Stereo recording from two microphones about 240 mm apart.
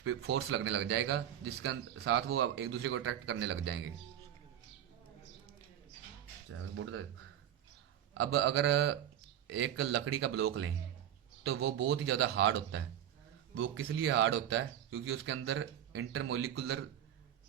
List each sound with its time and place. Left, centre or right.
0.0 s a man's voice: right
8.1 s a man's voice: right